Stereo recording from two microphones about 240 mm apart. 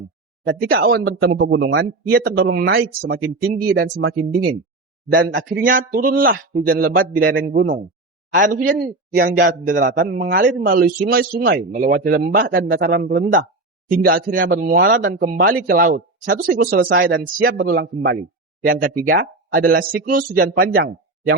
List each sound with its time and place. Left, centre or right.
0.4 s speech: right
1.5 s speech: right